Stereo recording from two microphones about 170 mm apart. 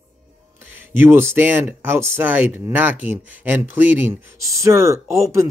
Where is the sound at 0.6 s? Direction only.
10° right (ahead or behind).